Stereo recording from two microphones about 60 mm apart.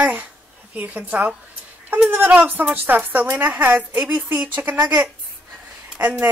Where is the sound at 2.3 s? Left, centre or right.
Right.